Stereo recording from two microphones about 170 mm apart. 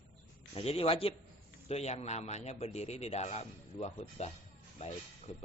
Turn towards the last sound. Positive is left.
turn(degrees=40)  # may be behind; listen again after turning